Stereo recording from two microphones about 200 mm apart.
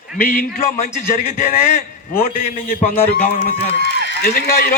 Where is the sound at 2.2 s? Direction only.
35° left (ahead or behind).